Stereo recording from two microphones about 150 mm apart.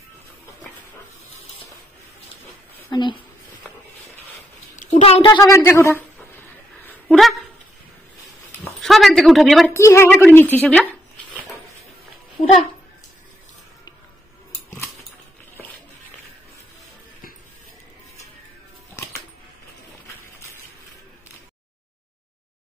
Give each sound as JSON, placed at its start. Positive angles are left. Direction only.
{"t": 2.9, "sound": "a woman's voice", "side_deg": 30}
{"t": 5.0, "sound": "a woman's voice", "side_deg": 35}
{"t": 5.4, "sound": "a woman's voice", "side_deg": 15}
{"t": 6.8, "sound": "a sound", "side_deg": 10}
{"t": 7.2, "sound": "speech", "side_deg": 0}
{"t": 8.8, "sound": "a sound", "side_deg": 0}
{"t": 9.8, "sound": "a woman's voice", "side_deg": 15}